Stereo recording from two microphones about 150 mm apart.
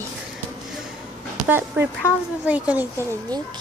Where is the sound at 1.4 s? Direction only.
15° right (ahead or behind).